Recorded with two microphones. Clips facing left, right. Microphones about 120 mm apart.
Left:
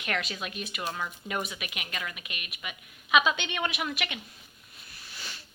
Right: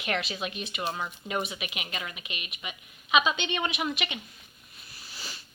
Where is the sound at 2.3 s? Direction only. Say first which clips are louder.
Right 2 dB; 55° left (ahead or behind).